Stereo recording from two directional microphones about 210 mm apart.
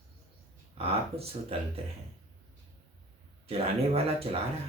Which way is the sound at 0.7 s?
25° right (ahead or behind).